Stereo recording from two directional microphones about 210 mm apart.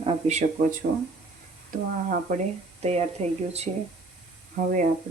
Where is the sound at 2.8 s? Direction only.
30° right (ahead or behind).